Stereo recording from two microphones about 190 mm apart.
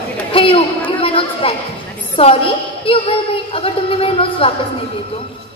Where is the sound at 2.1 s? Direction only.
30° left (ahead or behind).